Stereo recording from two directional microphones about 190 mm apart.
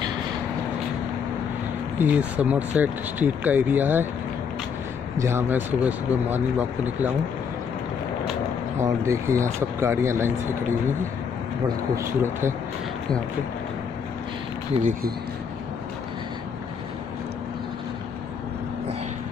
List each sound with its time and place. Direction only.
2.0 s speech: 10° right (ahead or behind)
5.1 s speech: 15° right (ahead or behind)
8.7 s speech: 15° right (ahead or behind)
11.9 s speech: 15° right (ahead or behind)
14.8 s speech: 40° right (ahead or behind)